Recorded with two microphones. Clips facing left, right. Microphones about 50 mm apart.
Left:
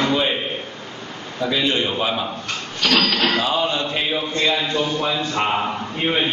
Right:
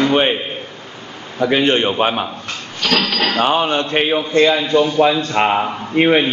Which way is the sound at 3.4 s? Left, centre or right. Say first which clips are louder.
Right 5 dB; right.